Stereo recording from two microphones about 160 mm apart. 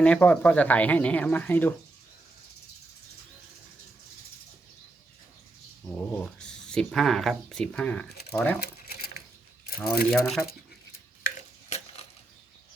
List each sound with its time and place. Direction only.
0.0 s speech: 10° left (ahead or behind)
6.1 s speech: 5° left (ahead or behind)
8.6 s a sound: 75° left (ahead or behind)
9.6 s speech: 70° left (ahead or behind)
10.1 s speech: 5° left (ahead or behind)